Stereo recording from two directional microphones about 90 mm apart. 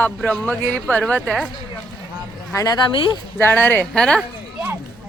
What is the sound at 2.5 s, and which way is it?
Speech, 35° left (ahead or behind).